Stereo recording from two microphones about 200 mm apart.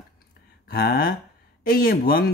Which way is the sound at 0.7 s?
45° left (ahead or behind).